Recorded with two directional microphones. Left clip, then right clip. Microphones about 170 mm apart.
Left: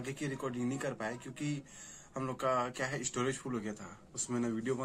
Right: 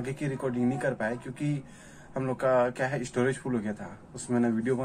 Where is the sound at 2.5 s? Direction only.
25° left (ahead or behind).